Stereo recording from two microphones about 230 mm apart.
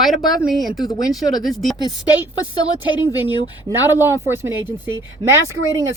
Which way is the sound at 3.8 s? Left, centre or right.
Centre.